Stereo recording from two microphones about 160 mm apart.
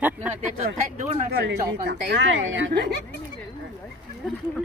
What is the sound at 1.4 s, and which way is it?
Speech, 90° right.